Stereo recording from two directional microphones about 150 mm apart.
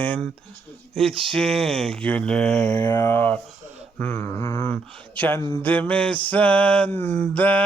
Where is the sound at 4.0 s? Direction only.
15° left (ahead or behind).